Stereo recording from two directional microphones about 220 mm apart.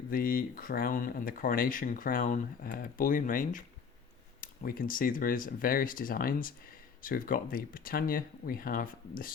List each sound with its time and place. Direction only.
0.1 s speech: 40° left (ahead or behind)